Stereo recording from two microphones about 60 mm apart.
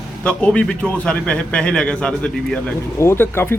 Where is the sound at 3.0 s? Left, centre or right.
Left.